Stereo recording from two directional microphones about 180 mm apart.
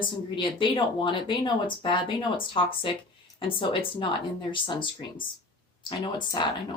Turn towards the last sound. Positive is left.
turn(degrees=25)  # may be behind; listen again after turning